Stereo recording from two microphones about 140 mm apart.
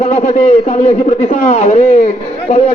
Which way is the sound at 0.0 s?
50° left (ahead or behind).